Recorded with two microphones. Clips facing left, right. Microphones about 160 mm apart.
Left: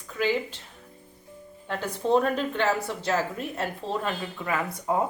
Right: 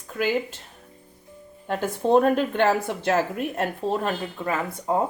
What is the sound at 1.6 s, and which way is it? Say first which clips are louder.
A woman's voice: right 4 dB; 45° right (ahead or behind).